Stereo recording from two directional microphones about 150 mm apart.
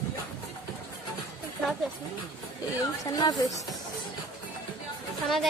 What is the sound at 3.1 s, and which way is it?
Speech, 25° left (ahead or behind).